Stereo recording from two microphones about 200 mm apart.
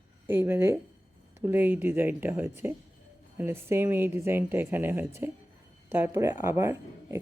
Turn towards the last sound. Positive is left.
turn(degrees=-15)  # may be behind; listen again after turning